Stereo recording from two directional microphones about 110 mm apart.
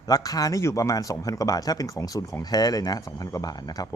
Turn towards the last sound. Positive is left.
turn(degrees=35)  # may be behind; listen again after turning